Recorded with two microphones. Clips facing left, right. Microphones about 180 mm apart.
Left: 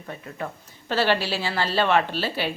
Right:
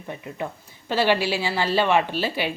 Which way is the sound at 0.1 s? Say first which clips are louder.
Right 2 dB; 15° right (ahead or behind).